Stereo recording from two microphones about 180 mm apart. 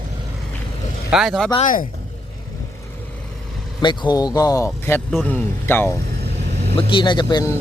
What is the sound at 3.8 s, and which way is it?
Speech, 25° left (ahead or behind).